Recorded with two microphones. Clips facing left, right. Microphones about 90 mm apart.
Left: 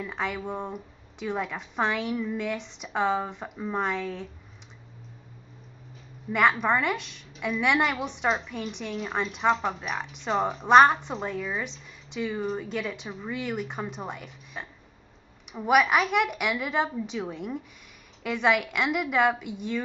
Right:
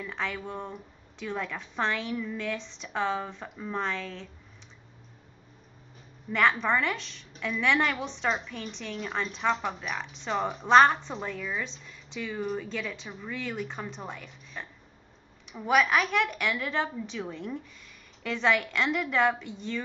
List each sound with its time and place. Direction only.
0.0 s a woman's voice: 15° left (ahead or behind)
6.6 s a woman's voice: 15° left (ahead or behind)